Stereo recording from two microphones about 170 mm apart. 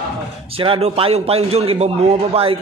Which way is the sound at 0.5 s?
35° right (ahead or behind).